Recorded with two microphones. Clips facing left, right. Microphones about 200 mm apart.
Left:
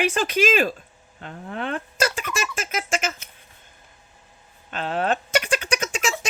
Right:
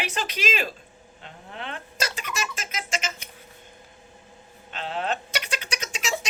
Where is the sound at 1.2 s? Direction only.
50° left (ahead or behind).